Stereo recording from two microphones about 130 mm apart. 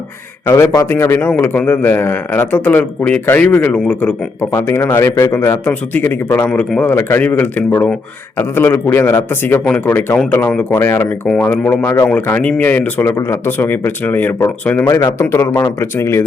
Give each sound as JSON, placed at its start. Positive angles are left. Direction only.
{"t": 0.4, "sound": "a man's voice", "side_deg": 20}